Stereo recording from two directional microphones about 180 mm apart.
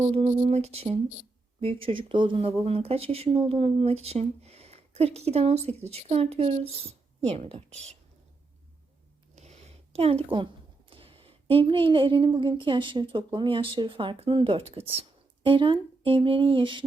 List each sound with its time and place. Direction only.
0.0 s speech: 35° right (ahead or behind)
9.3 s a sound: 40° right (ahead or behind)
10.3 s a woman's voice: 30° right (ahead or behind)